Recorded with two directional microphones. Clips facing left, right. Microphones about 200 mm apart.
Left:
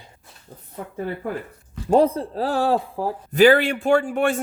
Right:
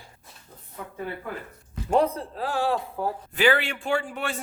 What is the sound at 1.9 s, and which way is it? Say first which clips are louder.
A man's voice: left 5 dB; 30° left (ahead or behind).